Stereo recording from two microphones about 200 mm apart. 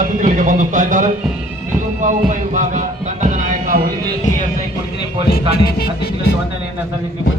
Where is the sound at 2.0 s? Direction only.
40° right (ahead or behind).